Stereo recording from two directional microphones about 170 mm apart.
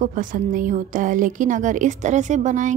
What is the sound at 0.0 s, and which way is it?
A woman's voice, 50° right (ahead or behind).